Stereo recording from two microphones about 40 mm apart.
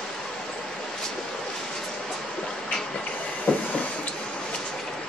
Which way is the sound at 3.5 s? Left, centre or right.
Left.